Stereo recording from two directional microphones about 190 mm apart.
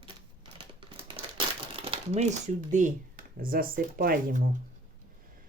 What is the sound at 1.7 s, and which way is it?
Speech, 30° right (ahead or behind).